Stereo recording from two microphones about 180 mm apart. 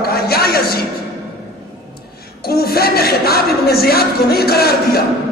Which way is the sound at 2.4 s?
60° left (ahead or behind).